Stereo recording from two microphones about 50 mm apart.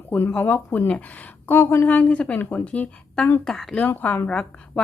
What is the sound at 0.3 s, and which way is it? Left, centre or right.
Speech, left.